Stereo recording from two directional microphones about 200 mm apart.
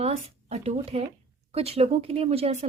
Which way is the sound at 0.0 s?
30° right (ahead or behind).